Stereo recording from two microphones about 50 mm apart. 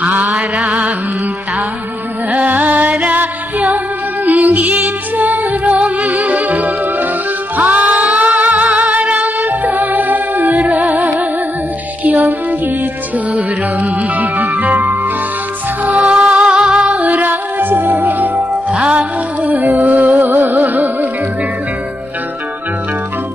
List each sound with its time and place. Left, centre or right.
0.0 s mantra: right
2.3 s music: right
15.8 s music: right
16.8 s music: right
18.7 s music: right